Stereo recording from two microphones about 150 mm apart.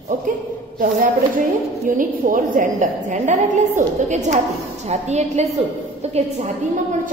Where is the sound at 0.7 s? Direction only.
65° right (ahead or behind).